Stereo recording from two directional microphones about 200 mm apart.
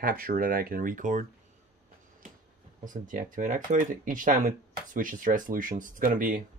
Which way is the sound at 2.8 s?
40° right (ahead or behind).